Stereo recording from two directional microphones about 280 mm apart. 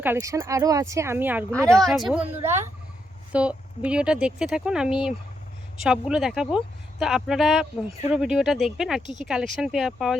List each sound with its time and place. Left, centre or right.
0.0 s speech: centre